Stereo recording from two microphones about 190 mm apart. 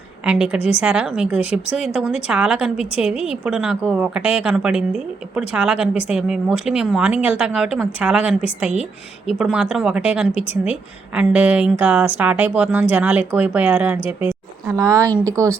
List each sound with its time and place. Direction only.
0.3 s a woman's voice: 5° right (ahead or behind)